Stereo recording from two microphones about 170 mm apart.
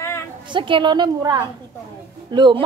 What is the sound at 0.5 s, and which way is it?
A woman's voice, 30° right (ahead or behind).